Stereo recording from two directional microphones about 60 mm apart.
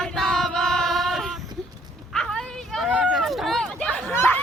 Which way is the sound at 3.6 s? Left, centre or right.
Centre.